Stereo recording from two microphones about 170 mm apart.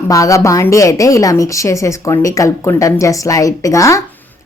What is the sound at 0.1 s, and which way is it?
A woman's voice, 20° left (ahead or behind).